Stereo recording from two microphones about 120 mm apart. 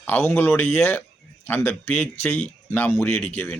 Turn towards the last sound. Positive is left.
turn(degrees=15)  # may be behind; listen again after turning